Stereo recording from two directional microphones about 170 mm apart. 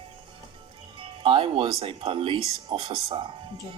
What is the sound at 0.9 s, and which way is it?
Speech, 30° right (ahead or behind).